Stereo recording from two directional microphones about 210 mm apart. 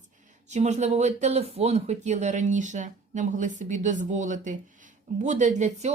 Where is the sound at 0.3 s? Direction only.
35° right (ahead or behind).